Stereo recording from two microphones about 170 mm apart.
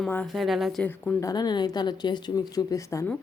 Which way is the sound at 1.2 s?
20° left (ahead or behind).